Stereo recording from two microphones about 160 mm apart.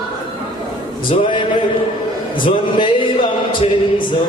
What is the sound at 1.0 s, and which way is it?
Music, 30° left (ahead or behind).